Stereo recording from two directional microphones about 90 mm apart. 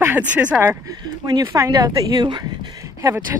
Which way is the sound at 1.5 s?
40° right (ahead or behind).